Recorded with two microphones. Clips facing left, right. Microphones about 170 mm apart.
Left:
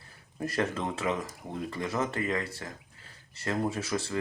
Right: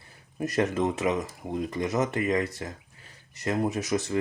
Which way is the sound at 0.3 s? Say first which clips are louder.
Right 5 dB; 20° right (ahead or behind).